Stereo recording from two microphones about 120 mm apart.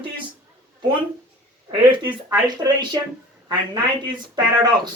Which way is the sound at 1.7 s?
40° right (ahead or behind).